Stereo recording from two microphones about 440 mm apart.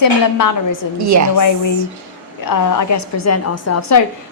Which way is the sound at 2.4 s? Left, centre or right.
Left.